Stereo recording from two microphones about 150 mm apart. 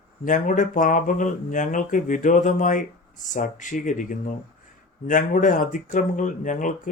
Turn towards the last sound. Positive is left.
turn(degrees=60)  # may be behind; listen again after turning